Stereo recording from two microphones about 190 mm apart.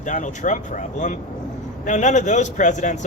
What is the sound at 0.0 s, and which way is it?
Speech, 40° left (ahead or behind).